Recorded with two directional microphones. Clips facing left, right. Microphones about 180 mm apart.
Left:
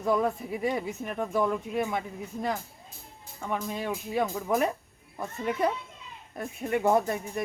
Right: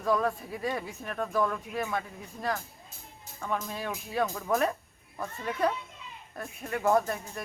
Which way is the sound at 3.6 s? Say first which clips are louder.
Left 4 dB; 20° left (ahead or behind).